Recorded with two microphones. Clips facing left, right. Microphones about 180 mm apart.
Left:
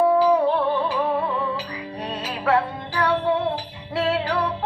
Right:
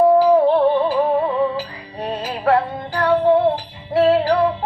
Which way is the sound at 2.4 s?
45° right (ahead or behind).